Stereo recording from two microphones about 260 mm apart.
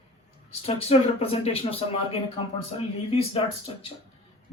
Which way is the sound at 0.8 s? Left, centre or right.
Left.